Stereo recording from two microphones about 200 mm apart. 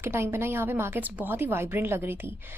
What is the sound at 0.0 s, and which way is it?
A woman's voice, 10° right (ahead or behind).